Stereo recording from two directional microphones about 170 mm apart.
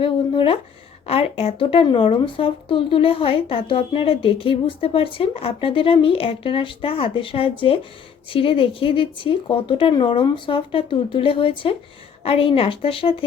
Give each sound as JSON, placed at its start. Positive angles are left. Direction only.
{"t": 0.0, "sound": "speech", "side_deg": 30}